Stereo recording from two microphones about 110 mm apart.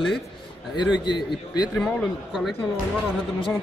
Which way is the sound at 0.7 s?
40° left (ahead or behind).